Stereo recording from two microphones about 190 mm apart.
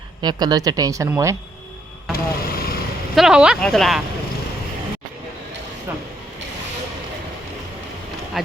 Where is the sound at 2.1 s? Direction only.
50° left (ahead or behind).